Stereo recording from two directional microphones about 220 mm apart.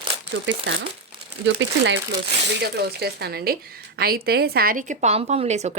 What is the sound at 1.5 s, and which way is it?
Speech, 55° right (ahead or behind).